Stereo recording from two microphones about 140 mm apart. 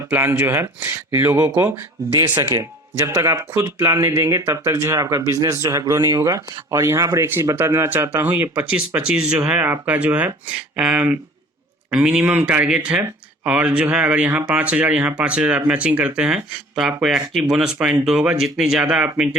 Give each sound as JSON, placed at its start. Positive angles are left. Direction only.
{"t": 0.1, "sound": "speech", "side_deg": -20}